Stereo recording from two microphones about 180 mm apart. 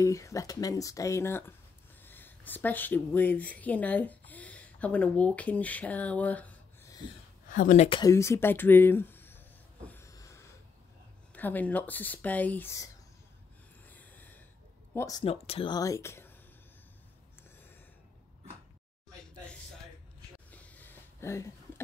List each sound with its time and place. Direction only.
0.0 s speech: 15° left (ahead or behind)
7.4 s speech: 45° left (ahead or behind)
8.0 s speech: 15° left (ahead or behind)
9.8 s a sound: 15° left (ahead or behind)
11.3 s speech: 10° left (ahead or behind)
13.8 s a sound: 10° left (ahead or behind)
15.0 s speech: 20° left (ahead or behind)
15.2 s speech: 35° left (ahead or behind); by 16.3 s 15° left (ahead or behind)
19.1 s a sound: 5° left (ahead or behind)